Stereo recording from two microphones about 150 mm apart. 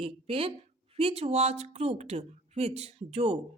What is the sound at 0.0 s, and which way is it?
Speech, 40° right (ahead or behind).